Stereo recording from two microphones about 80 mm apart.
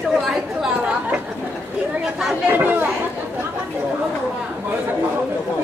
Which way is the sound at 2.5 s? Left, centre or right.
Right.